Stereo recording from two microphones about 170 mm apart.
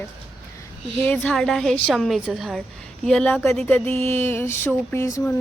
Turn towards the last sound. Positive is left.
turn(degrees=15)  # may be behind; listen again after turning